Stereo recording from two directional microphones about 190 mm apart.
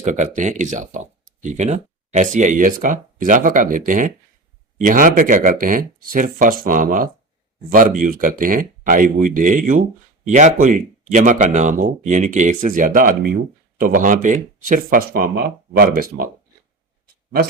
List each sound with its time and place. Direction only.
0.0 s speech: 40° right (ahead or behind)